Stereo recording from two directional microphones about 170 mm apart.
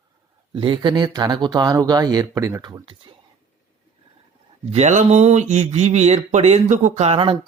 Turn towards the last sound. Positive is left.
turn(degrees=-35)  # may be behind; listen again after turning